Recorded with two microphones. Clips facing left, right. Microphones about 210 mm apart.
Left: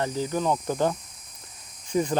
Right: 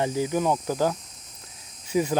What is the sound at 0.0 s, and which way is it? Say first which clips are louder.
Speech: right 2 dB; 10° right (ahead or behind).